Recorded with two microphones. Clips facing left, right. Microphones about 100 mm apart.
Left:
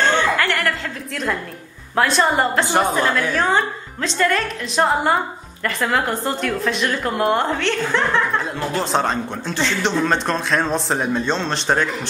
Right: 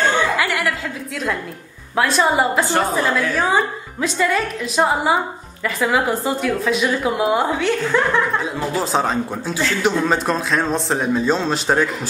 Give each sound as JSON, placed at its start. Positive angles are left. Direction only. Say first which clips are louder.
{"t": 0.0, "sound": "chuckle", "louder": "even", "side_deg": -5}
{"t": 2.0, "sound": "a woman's voice", "louder": "even", "side_deg": 0}